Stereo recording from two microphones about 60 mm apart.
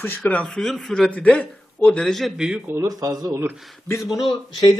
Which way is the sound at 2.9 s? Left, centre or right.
Right.